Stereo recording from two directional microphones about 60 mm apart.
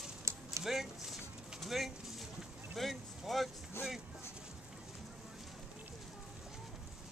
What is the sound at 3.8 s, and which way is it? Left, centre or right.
Speech, left.